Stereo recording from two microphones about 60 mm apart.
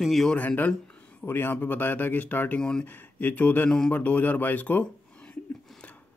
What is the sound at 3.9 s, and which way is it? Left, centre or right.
Speech, left.